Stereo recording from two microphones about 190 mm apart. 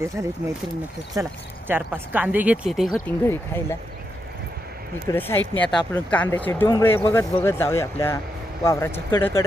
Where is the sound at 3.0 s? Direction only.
10° left (ahead or behind).